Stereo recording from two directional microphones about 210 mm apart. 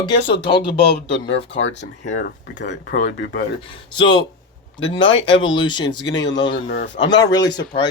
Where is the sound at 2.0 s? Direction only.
40° left (ahead or behind).